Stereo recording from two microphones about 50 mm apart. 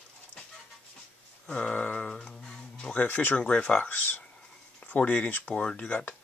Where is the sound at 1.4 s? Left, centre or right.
Left.